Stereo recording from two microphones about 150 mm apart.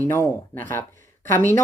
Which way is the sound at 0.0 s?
15° left (ahead or behind).